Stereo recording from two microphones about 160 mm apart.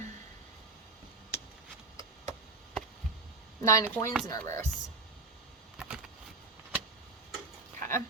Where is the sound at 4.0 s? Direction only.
15° left (ahead or behind).